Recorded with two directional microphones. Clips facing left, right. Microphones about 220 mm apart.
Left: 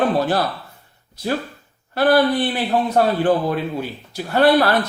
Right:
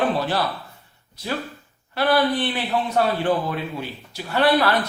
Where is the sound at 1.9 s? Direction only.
50° left (ahead or behind).